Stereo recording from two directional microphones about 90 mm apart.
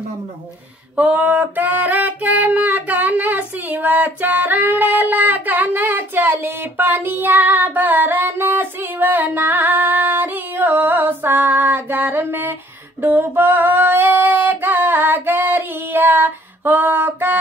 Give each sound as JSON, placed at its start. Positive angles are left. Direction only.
{"t": 0.9, "sound": "female singing", "side_deg": -15}